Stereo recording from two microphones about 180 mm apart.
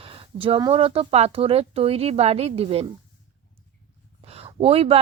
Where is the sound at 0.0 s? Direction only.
30° right (ahead or behind).